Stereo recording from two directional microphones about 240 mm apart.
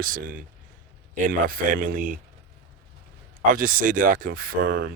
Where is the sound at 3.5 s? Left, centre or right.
Right.